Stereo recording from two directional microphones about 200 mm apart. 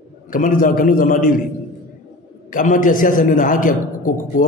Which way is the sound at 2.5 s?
40° left (ahead or behind).